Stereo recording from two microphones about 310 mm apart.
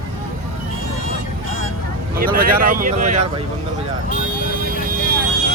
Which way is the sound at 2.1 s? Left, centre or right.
Right.